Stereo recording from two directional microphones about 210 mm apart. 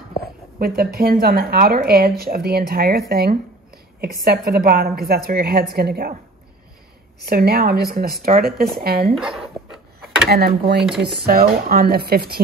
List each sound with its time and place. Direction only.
0.6 s speech: 45° right (ahead or behind)
7.2 s speech: 50° right (ahead or behind)
9.1 s a sound: centre (ahead or behind)
10.3 s speech: 50° right (ahead or behind)